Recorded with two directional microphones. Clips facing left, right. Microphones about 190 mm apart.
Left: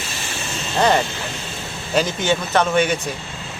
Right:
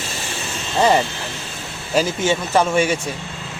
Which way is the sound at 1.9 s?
5° right (ahead or behind).